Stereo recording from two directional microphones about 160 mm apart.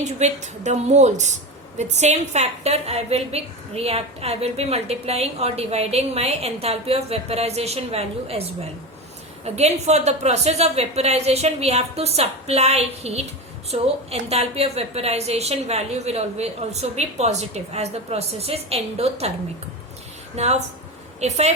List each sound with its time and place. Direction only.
0.0 s a woman's voice: 45° right (ahead or behind)
20.3 s a woman's voice: 45° right (ahead or behind)